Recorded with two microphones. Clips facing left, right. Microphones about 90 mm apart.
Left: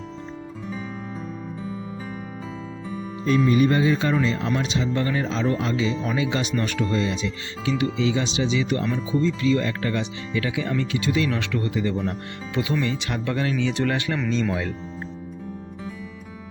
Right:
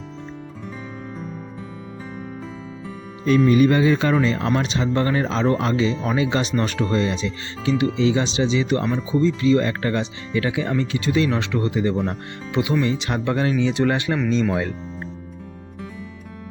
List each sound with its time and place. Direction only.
3.2 s speech: 70° right (ahead or behind)
4.7 s speech: 45° right (ahead or behind); by 14.2 s 25° right (ahead or behind)